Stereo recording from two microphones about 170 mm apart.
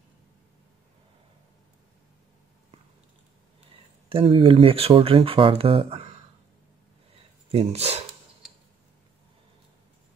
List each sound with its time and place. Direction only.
4.1 s speech: 30° right (ahead or behind)
7.5 s speech: 40° right (ahead or behind)